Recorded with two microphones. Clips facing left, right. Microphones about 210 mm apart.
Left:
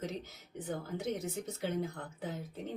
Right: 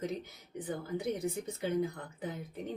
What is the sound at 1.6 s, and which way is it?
Speech, 15° right (ahead or behind).